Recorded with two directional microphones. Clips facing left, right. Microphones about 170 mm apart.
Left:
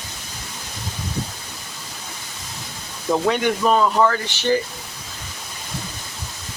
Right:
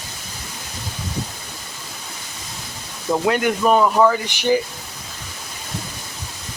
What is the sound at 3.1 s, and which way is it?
Speech, 5° right (ahead or behind).